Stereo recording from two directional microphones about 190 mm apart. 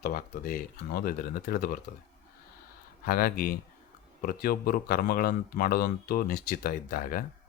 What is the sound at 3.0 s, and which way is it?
Speech, 50° left (ahead or behind).